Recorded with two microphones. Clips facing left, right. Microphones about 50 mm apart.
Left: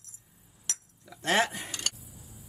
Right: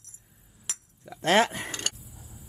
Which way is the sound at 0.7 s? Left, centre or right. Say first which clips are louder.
Left 1 dB; centre.